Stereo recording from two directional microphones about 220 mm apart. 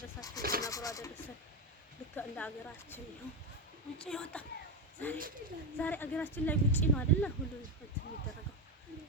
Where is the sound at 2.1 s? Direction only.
5° left (ahead or behind).